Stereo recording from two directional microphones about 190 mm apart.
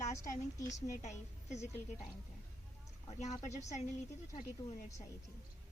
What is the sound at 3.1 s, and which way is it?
Speech, 35° left (ahead or behind).